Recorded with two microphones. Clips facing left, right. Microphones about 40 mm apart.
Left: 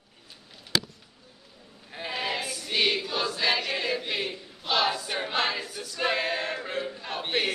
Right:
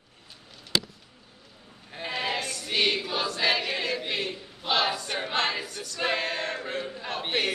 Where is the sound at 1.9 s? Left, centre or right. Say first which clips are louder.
Right 1 dB; centre.